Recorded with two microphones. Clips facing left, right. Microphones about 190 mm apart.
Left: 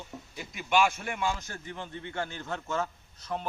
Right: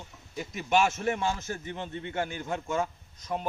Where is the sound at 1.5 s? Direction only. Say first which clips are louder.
Right 4 dB; 20° right (ahead or behind).